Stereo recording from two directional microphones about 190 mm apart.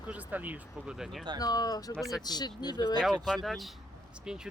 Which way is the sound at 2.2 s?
20° left (ahead or behind).